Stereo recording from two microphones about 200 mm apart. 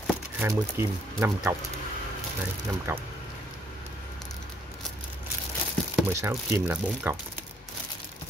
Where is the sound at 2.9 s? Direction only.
10° right (ahead or behind).